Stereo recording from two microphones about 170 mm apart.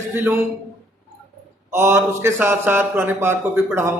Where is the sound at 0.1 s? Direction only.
15° right (ahead or behind).